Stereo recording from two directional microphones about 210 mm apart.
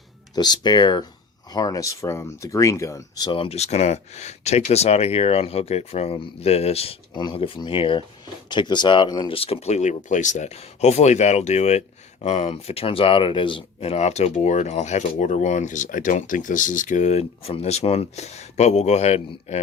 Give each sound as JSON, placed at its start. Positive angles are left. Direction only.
{"t": 0.3, "sound": "speech", "side_deg": 20}